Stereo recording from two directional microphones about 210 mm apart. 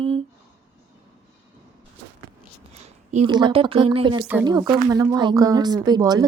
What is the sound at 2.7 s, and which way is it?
Speech, 30° right (ahead or behind).